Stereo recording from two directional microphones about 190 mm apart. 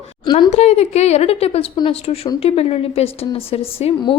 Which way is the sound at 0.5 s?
35° left (ahead or behind).